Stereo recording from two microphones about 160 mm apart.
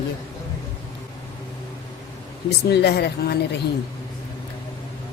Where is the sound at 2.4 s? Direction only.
90° left.